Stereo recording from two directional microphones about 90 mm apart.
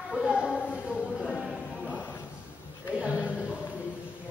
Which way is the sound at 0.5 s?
15° left (ahead or behind).